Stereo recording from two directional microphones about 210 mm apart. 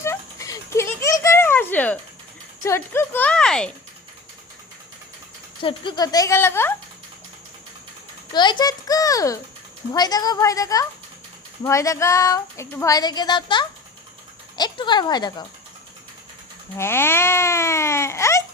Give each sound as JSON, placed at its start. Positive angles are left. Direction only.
{"t": 0.0, "sound": "a sound", "side_deg": 15}
{"t": 2.6, "sound": "speech", "side_deg": 10}
{"t": 5.6, "sound": "speech", "side_deg": 20}
{"t": 8.3, "sound": "speech", "side_deg": 20}
{"t": 16.7, "sound": "speech", "side_deg": 10}